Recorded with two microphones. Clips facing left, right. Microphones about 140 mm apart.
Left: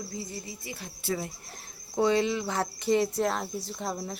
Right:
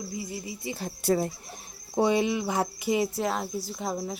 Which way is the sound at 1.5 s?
15° right (ahead or behind).